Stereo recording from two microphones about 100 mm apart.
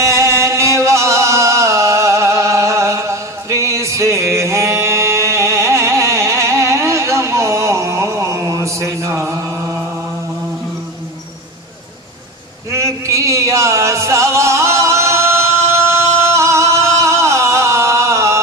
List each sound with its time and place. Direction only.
0.0 s music: 30° right (ahead or behind)
12.7 s music: 30° right (ahead or behind)